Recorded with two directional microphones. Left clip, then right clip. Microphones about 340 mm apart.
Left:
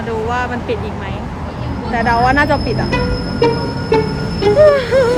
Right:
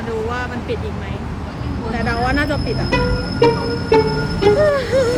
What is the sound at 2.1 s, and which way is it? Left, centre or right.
Speech, centre.